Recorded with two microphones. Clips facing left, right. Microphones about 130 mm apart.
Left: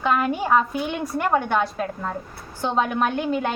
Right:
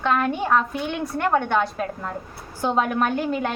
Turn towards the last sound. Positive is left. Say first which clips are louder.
# even
turn(degrees=0)  # may be behind; listen again after turning